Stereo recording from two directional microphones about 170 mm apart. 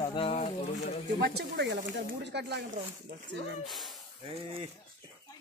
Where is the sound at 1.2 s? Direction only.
75° right (ahead or behind).